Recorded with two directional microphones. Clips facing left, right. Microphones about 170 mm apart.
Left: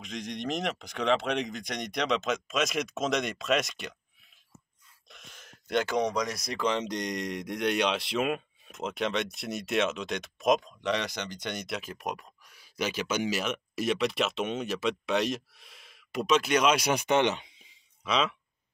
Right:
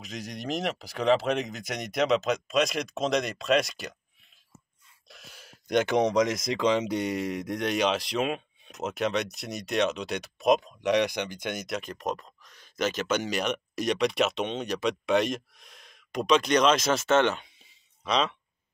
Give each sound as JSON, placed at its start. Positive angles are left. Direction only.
{"t": 0.1, "sound": "speech", "side_deg": -5}
{"t": 5.0, "sound": "a sound", "side_deg": -5}
{"t": 5.9, "sound": "speech", "side_deg": -20}
{"t": 10.8, "sound": "speech", "side_deg": -15}
{"t": 11.2, "sound": "speech", "side_deg": -50}
{"t": 11.5, "sound": "speech", "side_deg": 0}
{"t": 15.6, "sound": "a sound", "side_deg": 5}
{"t": 16.3, "sound": "speech", "side_deg": 5}
{"t": 18.0, "sound": "speech", "side_deg": 5}